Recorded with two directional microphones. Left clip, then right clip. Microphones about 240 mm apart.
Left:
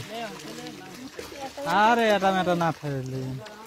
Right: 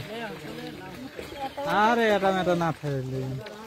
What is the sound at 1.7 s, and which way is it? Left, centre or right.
Speech, left.